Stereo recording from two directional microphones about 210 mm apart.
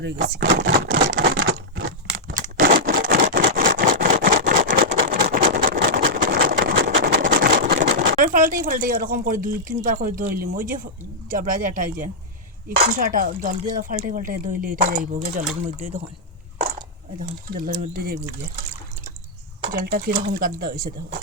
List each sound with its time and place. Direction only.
0.0 s a sound: 55° right (ahead or behind)
0.9 s crumpling: 55° right (ahead or behind)
2.2 s a sound: 40° right (ahead or behind)
7.9 s speech: 50° right (ahead or behind)
17.2 s speech: 40° right (ahead or behind)
19.7 s speech: 45° right (ahead or behind)